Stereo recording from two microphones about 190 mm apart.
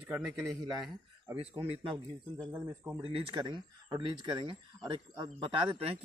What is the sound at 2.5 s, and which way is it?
Speech, 10° right (ahead or behind).